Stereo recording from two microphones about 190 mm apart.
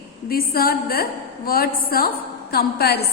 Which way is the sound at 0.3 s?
50° left (ahead or behind).